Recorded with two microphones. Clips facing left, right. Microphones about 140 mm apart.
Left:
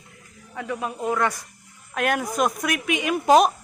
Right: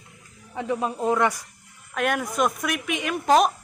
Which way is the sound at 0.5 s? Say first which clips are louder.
Right 3 dB; 25° right (ahead or behind).